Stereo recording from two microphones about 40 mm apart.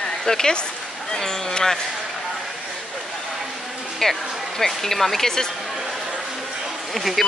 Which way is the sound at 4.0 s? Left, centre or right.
Centre.